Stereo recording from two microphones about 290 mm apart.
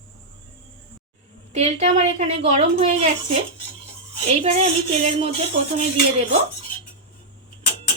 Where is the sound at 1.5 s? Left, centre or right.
Right.